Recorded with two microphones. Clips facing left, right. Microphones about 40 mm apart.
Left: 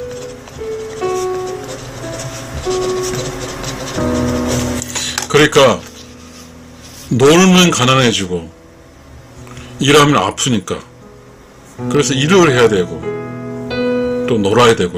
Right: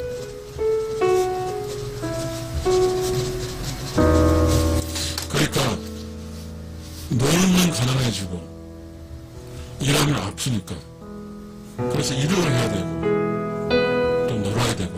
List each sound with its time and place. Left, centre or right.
0.0 s music: left
7.1 s a man's voice: left
9.8 s a man's voice: left
11.9 s a man's voice: left
13.0 s music: centre
14.2 s a man's voice: left